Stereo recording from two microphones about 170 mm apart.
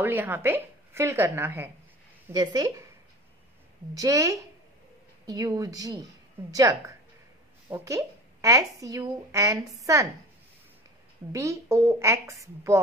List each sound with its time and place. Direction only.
0.0 s a woman's voice: 10° right (ahead or behind)
2.3 s a woman's voice: 25° right (ahead or behind)
3.9 s a woman's voice: 20° right (ahead or behind)
11.3 s a woman's voice: 15° right (ahead or behind)